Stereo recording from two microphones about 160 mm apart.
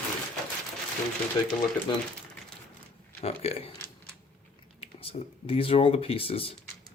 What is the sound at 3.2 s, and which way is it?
Speech, 40° left (ahead or behind).